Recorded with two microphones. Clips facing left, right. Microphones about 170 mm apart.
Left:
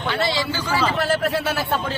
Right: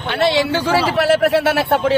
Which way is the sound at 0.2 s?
65° right (ahead or behind).